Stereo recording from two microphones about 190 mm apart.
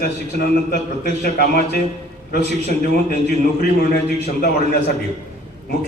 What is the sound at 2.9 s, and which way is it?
A man's voice, 55° left (ahead or behind).